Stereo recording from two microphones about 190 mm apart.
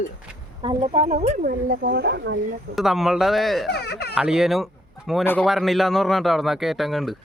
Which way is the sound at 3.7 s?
60° left (ahead or behind).